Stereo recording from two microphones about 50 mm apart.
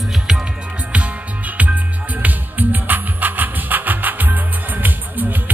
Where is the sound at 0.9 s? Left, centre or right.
Right.